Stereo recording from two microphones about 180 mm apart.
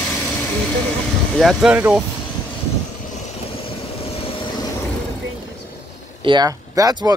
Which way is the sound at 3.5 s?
30° left (ahead or behind).